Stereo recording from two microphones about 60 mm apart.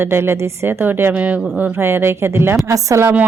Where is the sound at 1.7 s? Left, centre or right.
Right.